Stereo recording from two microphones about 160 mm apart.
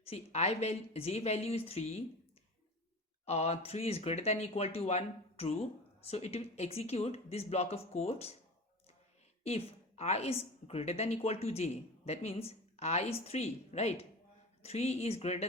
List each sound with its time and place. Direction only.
0.0 s a woman's voice: 40° left (ahead or behind)
3.2 s a woman's voice: 40° left (ahead or behind)
9.4 s a woman's voice: 40° left (ahead or behind)